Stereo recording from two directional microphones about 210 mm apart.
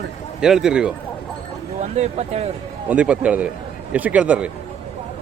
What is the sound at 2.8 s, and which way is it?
Speech, 5° right (ahead or behind).